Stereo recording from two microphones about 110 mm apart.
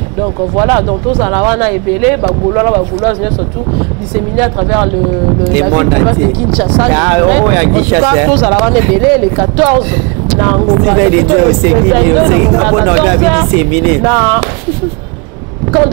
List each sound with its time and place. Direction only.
0.7 s speech: centre (ahead or behind)
4.1 s speech: centre (ahead or behind)